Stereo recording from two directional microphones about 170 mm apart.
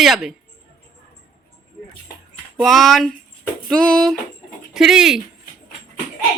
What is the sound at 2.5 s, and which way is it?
Speech, centre (ahead or behind).